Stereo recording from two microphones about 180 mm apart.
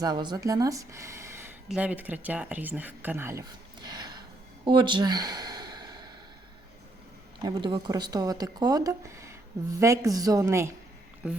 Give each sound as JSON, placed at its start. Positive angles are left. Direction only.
{"t": 0.0, "sound": "speech", "side_deg": -25}
{"t": 3.8, "sound": "a sound", "side_deg": -25}
{"t": 7.4, "sound": "speech", "side_deg": -25}